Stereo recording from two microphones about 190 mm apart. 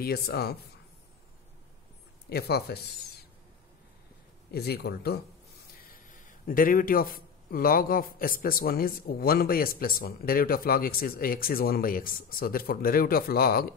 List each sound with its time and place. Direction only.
0.0 s speech: 55° left (ahead or behind)
2.2 s speech: 60° left (ahead or behind)
4.5 s speech: 55° left (ahead or behind)
5.8 s a man's voice: 45° left (ahead or behind)